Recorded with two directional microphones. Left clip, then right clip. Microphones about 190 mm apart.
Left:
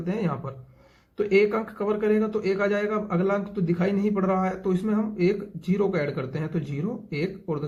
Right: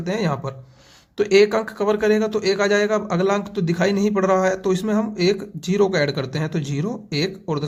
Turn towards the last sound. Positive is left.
turn(degrees=-40)  # may be behind; listen again after turning